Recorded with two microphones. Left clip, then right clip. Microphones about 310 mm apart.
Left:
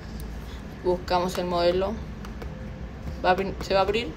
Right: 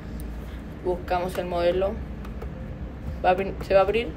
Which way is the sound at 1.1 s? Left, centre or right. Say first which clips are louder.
Right 1 dB; centre.